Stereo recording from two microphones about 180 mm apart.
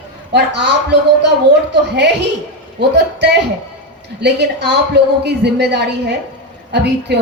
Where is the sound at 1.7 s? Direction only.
70° right (ahead or behind).